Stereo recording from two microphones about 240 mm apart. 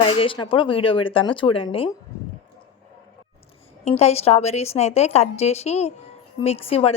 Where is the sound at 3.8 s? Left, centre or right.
Left.